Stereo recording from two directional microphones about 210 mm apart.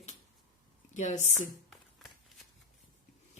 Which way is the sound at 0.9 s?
35° left (ahead or behind).